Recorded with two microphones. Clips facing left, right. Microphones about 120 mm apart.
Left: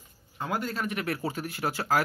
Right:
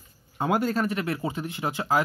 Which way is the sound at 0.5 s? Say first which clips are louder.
Right 7 dB; 45° right (ahead or behind).